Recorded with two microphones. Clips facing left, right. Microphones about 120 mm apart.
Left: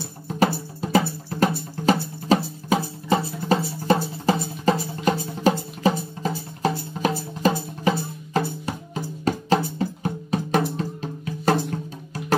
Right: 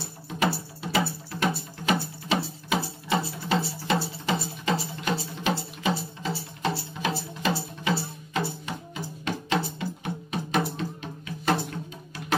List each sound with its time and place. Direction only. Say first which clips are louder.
0.3 s music: left 5 dB; 40° left (ahead or behind)